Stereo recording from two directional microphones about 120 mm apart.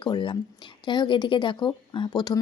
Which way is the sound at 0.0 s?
40° left (ahead or behind).